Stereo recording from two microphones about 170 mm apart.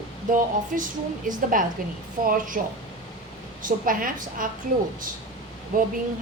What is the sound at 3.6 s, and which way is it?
Speech, 55° right (ahead or behind).